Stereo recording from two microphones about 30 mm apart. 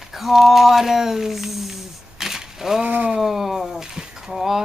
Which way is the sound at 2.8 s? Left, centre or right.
Right.